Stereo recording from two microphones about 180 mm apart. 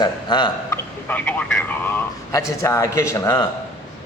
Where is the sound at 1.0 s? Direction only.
10° left (ahead or behind).